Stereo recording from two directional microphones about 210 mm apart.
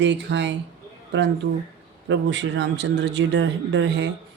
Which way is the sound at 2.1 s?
60° right (ahead or behind).